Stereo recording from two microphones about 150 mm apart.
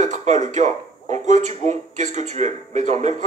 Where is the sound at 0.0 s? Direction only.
50° right (ahead or behind).